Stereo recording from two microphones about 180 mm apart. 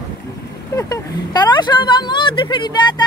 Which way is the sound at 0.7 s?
20° left (ahead or behind).